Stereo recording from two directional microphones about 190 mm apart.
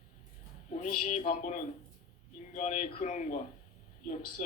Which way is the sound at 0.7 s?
45° left (ahead or behind).